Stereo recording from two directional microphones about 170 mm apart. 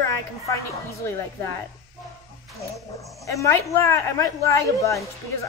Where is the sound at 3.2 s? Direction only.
20° left (ahead or behind).